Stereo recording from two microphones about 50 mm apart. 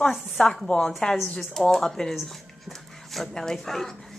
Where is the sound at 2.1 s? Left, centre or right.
Centre.